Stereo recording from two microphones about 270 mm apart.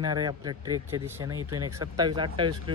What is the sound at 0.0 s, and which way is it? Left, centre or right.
Speech, centre.